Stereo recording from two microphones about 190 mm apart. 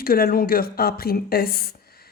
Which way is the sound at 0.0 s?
50° left (ahead or behind).